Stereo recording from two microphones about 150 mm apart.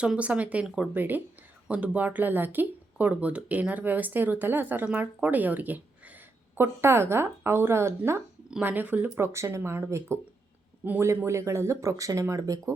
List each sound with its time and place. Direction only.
0.0 s speech: 10° right (ahead or behind)